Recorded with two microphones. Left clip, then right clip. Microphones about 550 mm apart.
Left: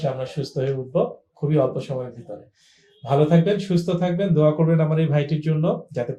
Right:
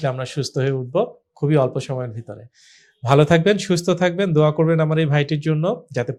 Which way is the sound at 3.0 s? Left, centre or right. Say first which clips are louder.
Right 4 dB; right.